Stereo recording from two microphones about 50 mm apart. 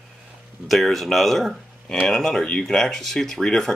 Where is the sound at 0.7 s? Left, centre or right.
Centre.